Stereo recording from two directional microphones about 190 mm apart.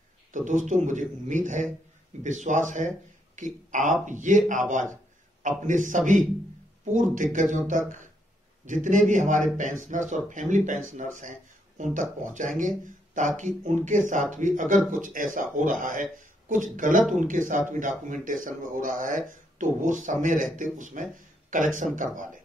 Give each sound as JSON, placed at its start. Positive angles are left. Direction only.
{"t": 0.3, "sound": "speech", "side_deg": -40}